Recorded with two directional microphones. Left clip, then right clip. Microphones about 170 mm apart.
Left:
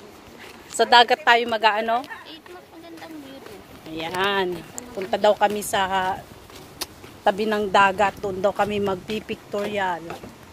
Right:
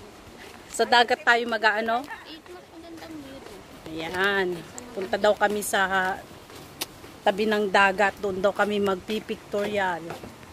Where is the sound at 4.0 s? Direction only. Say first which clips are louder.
Left 2 dB; 10° right (ahead or behind).